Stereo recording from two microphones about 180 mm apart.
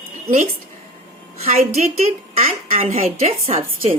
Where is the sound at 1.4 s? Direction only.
35° right (ahead or behind).